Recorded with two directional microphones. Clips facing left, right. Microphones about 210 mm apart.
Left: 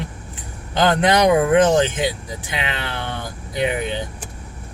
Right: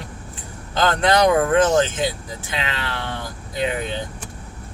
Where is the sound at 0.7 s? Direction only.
20° left (ahead or behind).